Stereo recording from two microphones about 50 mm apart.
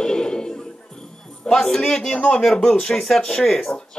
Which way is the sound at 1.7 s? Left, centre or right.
Centre.